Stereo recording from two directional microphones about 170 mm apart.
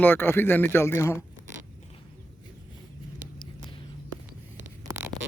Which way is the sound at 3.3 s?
30° left (ahead or behind).